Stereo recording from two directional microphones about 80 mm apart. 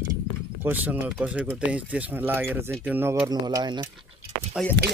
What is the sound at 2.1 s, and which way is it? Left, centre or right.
Speech, right.